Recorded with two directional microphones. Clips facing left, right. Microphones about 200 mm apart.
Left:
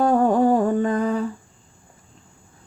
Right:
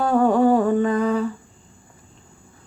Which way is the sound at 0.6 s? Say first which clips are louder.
Right 1 dB; 40° left (ahead or behind).